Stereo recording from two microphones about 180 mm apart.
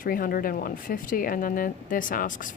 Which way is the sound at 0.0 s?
50° left (ahead or behind).